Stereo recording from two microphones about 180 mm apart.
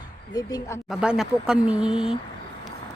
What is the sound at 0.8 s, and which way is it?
Speech, 5° right (ahead or behind).